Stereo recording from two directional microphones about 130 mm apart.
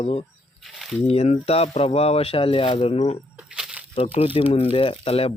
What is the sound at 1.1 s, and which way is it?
Speech, 55° left (ahead or behind).